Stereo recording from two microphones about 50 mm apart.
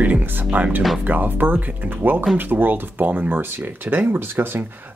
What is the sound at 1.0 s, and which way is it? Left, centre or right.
Speech, right.